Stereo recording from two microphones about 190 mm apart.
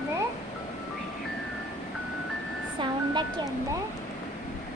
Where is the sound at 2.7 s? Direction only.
25° right (ahead or behind).